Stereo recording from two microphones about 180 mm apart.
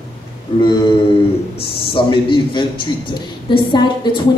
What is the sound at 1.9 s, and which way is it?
Speech, 30° left (ahead or behind).